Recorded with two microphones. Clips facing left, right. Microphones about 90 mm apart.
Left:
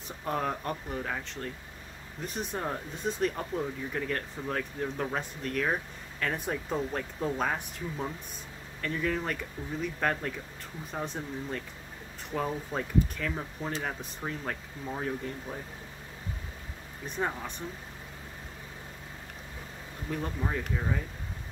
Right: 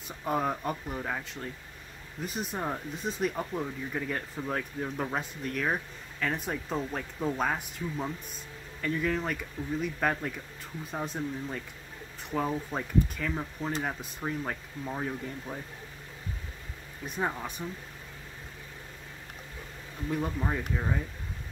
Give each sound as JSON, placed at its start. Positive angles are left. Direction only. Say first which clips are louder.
{"t": 0.2, "sound": "speech", "louder": "right 2 dB", "side_deg": -5}
{"t": 17.2, "sound": "speech", "louder": "right 1 dB", "side_deg": -10}
{"t": 20.2, "sound": "speech", "louder": "right 1 dB", "side_deg": -10}